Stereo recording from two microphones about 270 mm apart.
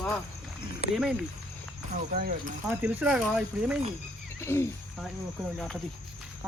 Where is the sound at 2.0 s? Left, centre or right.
Right.